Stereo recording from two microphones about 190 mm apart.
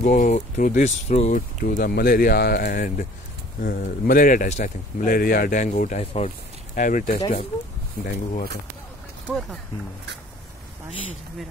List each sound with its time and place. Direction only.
0.0 s speech: 45° left (ahead or behind)
1.6 s speech: 45° left (ahead or behind)